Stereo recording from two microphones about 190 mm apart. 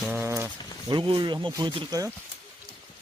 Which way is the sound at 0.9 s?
25° right (ahead or behind).